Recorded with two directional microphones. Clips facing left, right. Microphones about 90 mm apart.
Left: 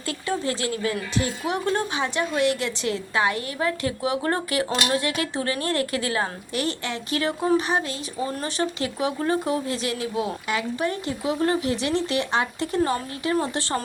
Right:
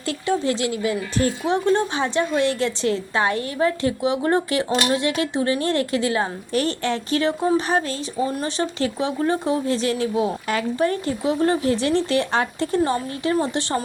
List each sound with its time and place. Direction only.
0.3 s speech: 20° right (ahead or behind)
1.5 s a woman's voice: 30° right (ahead or behind)
6.5 s a woman's voice: 35° right (ahead or behind)